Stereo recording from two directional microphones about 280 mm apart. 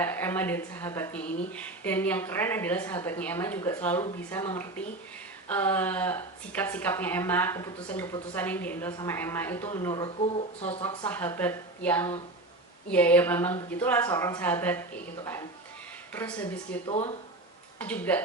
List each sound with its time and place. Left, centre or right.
0.0 s a woman's voice: centre
10.8 s a woman's voice: centre
16.8 s speech: centre
17.7 s speech: centre